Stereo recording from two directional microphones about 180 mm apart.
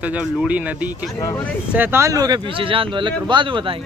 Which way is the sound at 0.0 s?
5° right (ahead or behind).